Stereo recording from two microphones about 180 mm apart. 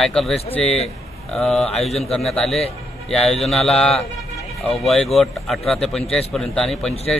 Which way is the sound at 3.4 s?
Centre (ahead or behind).